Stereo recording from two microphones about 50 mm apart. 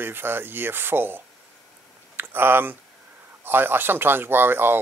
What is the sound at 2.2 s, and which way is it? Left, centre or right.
Speech, right.